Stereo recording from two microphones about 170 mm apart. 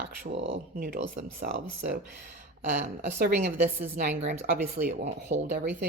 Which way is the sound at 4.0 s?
65° right (ahead or behind).